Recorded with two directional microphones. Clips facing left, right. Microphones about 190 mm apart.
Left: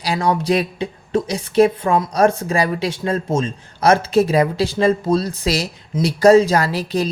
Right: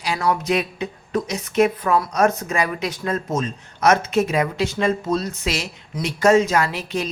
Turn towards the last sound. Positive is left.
turn(degrees=35)  # may be behind; listen again after turning